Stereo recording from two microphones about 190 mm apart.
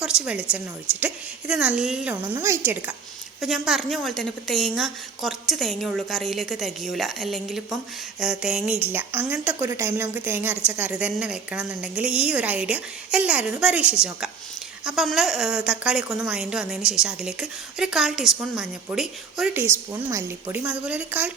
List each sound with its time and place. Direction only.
0.0 s speech: 5° right (ahead or behind)
19.9 s speech: 15° right (ahead or behind)
20.7 s speech: 5° right (ahead or behind)